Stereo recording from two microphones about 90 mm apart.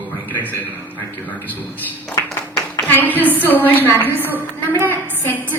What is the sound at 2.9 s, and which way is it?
A woman's voice, 20° left (ahead or behind).